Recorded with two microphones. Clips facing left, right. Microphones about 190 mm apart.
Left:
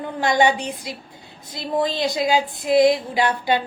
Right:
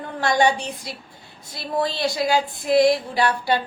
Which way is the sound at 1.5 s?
20° left (ahead or behind).